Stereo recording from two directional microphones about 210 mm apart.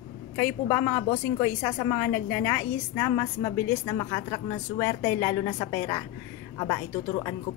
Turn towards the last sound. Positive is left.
turn(degrees=15)  # may be behind; listen again after turning